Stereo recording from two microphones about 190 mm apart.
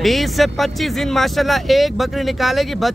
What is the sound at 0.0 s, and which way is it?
Speech, centre (ahead or behind).